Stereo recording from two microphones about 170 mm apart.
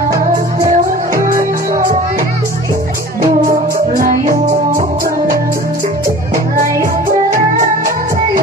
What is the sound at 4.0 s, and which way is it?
Music, 55° right (ahead or behind).